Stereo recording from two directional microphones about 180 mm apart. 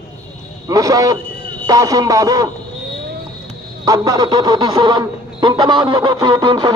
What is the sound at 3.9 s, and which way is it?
Speech, 20° right (ahead or behind).